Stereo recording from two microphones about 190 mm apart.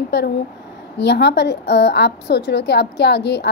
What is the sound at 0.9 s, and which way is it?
A woman's voice, 60° left (ahead or behind).